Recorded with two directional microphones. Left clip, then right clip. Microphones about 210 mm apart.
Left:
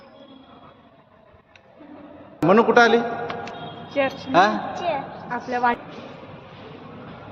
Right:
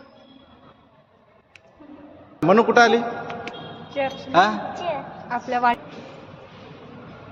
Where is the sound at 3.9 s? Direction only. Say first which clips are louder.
Left 3 dB; 35° left (ahead or behind).